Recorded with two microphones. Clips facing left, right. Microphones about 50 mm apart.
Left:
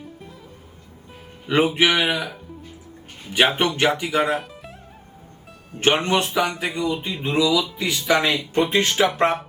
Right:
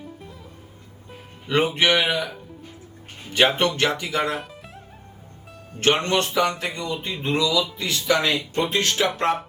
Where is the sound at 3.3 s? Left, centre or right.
Centre.